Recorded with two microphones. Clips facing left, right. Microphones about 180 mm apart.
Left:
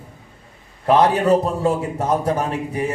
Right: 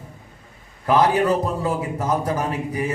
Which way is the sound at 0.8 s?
30° left (ahead or behind).